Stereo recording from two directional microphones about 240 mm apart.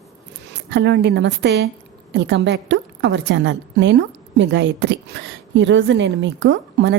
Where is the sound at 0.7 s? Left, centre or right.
Right.